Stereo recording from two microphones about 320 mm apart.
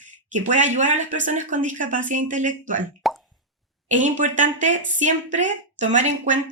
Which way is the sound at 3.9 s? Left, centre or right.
Right.